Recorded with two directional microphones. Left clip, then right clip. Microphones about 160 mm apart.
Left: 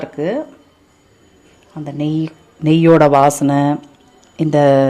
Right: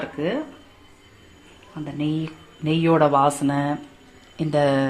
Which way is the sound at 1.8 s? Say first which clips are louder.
Left 6 dB; 90° left.